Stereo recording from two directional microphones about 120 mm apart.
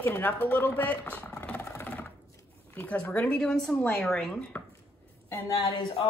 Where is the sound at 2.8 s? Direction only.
10° left (ahead or behind).